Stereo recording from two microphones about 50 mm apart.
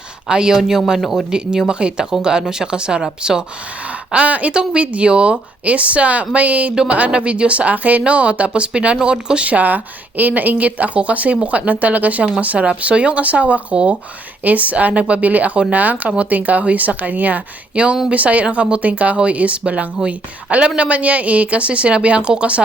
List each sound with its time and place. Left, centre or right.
0.3 s speech: centre
4.1 s speech: right